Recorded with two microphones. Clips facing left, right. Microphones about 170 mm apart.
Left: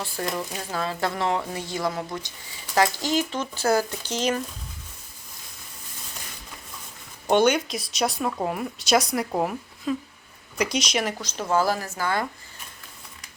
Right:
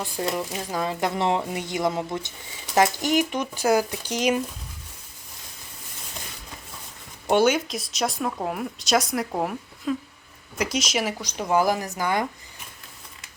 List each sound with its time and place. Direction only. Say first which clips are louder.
0.0 s speech: right 2 dB; 15° right (ahead or behind)
7.3 s a woman's voice: even; 5° right (ahead or behind)